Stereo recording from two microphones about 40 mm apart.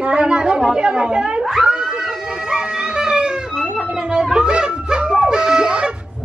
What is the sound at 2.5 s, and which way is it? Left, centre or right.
Music, centre.